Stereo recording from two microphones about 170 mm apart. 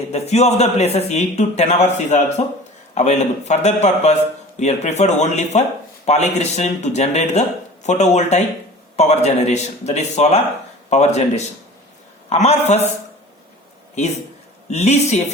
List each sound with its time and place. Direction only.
0.1 s speech: 40° left (ahead or behind)
14.7 s speech: 40° left (ahead or behind)